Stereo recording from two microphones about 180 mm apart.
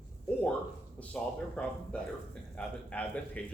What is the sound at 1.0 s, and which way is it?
A man's voice, 5° left (ahead or behind).